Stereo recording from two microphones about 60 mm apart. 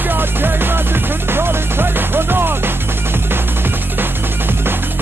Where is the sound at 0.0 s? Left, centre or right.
Right.